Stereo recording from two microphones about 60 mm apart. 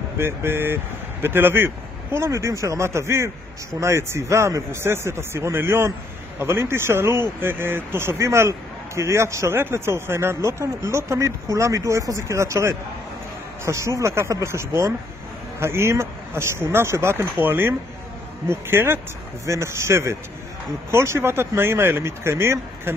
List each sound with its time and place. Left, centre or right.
0.2 s speech: right
2.3 s speech: right
19.4 s speech: right